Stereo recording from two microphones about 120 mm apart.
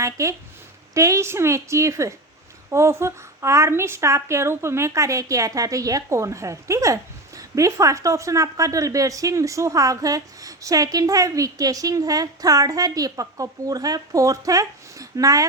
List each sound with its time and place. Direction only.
0.0 s a woman's voice: 25° right (ahead or behind)